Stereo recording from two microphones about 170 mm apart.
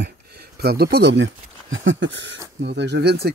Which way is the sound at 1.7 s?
90° right.